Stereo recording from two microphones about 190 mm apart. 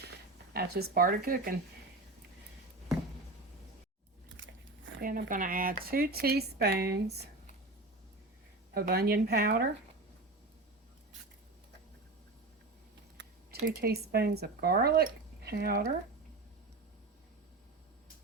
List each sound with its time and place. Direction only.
0.5 s speech: 55° right (ahead or behind)
4.9 s speech: 45° right (ahead or behind)
8.7 s speech: 55° right (ahead or behind)
13.1 s a sound: 65° right (ahead or behind)
13.7 s speech: 55° right (ahead or behind)